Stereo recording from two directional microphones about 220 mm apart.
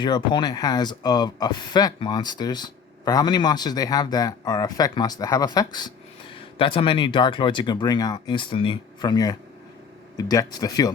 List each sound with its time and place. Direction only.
0.0 s speech: 20° left (ahead or behind)